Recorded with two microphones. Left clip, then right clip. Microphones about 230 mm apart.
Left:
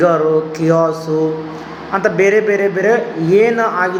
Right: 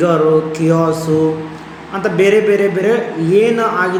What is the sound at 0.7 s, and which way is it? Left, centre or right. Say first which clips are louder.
Speech: left 2 dB; centre.